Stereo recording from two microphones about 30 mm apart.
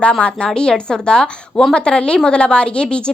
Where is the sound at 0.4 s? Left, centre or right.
Left.